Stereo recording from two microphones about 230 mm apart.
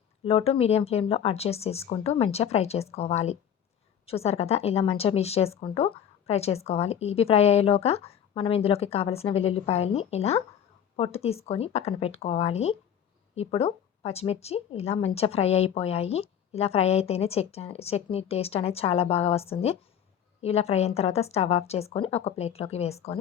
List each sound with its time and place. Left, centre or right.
0.3 s a woman's voice: left